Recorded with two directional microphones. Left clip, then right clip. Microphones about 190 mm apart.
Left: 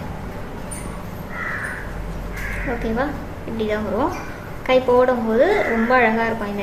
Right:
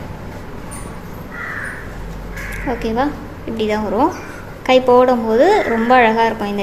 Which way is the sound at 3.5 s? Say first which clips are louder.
Right 5 dB; 40° right (ahead or behind).